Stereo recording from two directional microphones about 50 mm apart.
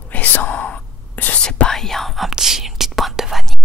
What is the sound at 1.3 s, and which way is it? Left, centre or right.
Whispering, left.